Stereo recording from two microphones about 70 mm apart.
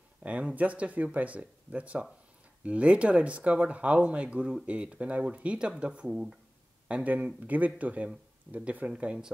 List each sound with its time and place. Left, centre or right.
0.2 s speech: centre
6.9 s speech: right